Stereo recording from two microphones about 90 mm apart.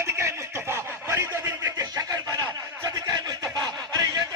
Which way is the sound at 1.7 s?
40° right (ahead or behind).